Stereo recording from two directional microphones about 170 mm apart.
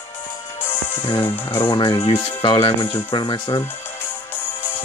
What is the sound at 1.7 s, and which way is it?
Speech, 30° left (ahead or behind).